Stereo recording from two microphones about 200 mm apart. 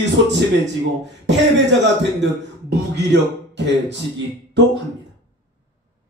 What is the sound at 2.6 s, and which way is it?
Speech, 60° right (ahead or behind).